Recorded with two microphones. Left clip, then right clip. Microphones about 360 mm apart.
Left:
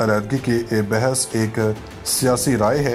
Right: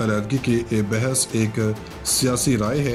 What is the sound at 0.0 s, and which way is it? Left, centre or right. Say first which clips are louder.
Speech: left 4 dB; centre.